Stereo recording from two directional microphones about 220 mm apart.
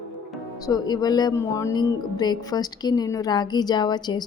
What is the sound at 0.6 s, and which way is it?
Speech, 20° left (ahead or behind).